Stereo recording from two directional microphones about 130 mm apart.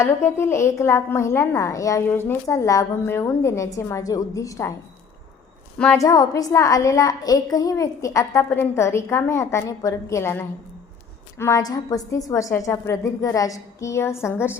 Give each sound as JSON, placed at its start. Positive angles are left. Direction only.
{"t": 0.0, "sound": "a woman's voice", "side_deg": 20}
{"t": 5.7, "sound": "a woman's voice", "side_deg": 5}
{"t": 6.0, "sound": "a woman's voice", "side_deg": 25}